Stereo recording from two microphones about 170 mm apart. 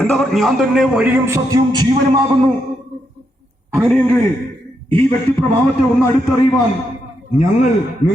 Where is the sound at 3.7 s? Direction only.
5° left (ahead or behind).